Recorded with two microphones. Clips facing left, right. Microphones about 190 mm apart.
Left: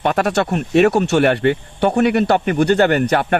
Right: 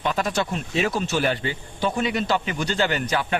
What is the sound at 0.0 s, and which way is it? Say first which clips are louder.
Speech: left 7 dB; 65° left (ahead or behind).